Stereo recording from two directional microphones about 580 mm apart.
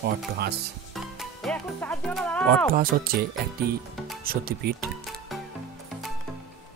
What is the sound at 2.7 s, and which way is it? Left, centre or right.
Speech, centre.